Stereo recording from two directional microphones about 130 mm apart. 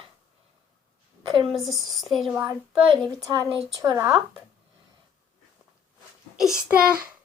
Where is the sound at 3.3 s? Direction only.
30° right (ahead or behind).